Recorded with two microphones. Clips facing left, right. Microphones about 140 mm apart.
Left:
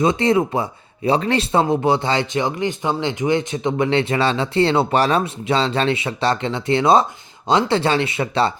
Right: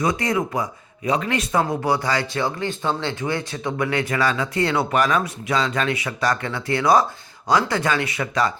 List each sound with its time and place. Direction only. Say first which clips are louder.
0.0 s speech: left 5 dB; 25° left (ahead or behind)